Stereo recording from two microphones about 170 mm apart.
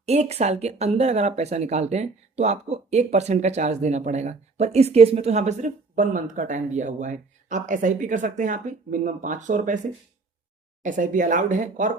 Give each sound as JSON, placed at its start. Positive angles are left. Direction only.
{"t": 0.0, "sound": "speech", "side_deg": -40}
{"t": 10.8, "sound": "speech", "side_deg": -50}